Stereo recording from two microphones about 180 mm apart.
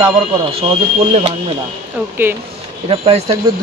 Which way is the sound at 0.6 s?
35° right (ahead or behind).